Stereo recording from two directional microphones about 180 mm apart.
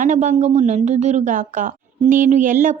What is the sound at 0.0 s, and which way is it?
A woman's voice, 45° right (ahead or behind).